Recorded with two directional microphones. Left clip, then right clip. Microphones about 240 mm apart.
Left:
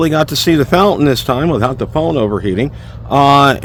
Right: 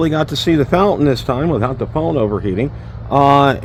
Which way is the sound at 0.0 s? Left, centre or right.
Left.